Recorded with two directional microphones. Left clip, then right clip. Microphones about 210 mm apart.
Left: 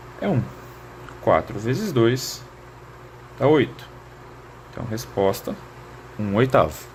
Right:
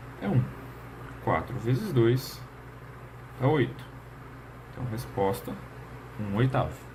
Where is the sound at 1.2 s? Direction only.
45° left (ahead or behind).